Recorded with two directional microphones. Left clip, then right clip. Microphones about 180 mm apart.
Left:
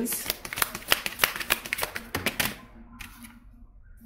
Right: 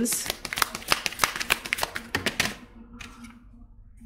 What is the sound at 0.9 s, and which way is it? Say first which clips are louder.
Shuffling cards: left 3 dB; 20° right (ahead or behind).